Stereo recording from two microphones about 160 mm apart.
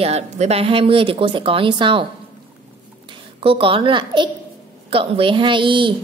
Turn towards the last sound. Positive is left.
turn(degrees=-30)  # may be behind; listen again after turning